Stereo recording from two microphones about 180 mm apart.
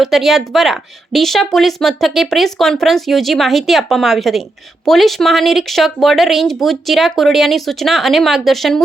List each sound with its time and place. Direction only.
0.0 s a woman's voice: centre (ahead or behind)